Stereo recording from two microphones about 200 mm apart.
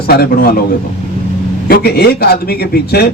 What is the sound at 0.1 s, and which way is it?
Speech, 50° left (ahead or behind).